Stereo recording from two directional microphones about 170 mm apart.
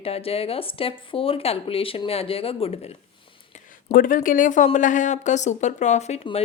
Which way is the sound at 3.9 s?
55° left (ahead or behind).